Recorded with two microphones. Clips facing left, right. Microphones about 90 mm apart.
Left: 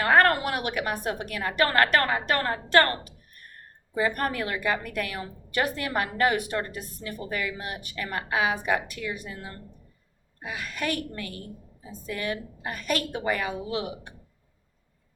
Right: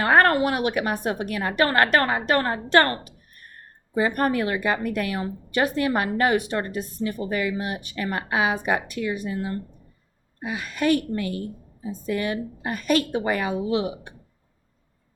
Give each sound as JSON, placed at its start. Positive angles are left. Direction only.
{"t": 0.0, "sound": "a woman's voice", "side_deg": -25}